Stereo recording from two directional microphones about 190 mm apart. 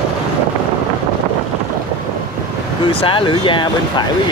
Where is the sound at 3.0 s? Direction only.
25° left (ahead or behind).